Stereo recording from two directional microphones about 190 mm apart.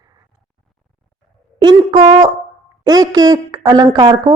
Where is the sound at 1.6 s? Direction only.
25° right (ahead or behind).